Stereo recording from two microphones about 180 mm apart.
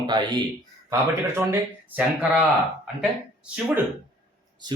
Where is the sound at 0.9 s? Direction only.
15° right (ahead or behind).